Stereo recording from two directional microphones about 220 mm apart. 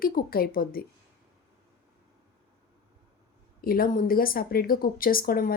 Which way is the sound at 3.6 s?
40° left (ahead or behind).